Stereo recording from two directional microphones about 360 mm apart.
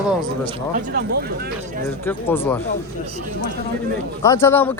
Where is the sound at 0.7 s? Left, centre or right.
Right.